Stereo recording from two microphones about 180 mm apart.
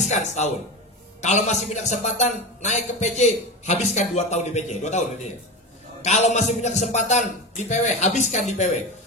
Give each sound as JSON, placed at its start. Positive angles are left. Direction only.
{"t": 0.0, "sound": "a man's voice", "side_deg": 40}